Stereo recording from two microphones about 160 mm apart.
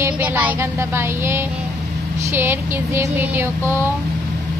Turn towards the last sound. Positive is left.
turn(degrees=-15)  # may be behind; listen again after turning